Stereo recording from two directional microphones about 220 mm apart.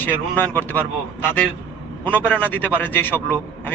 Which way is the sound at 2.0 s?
5° left (ahead or behind).